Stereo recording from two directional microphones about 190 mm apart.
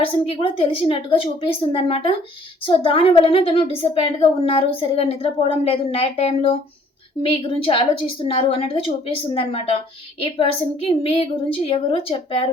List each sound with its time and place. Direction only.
0.0 s a woman's voice: 30° left (ahead or behind)